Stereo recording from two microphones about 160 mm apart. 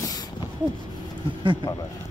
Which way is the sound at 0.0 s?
25° left (ahead or behind).